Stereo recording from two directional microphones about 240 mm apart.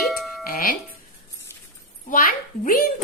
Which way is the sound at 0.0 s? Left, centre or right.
Centre.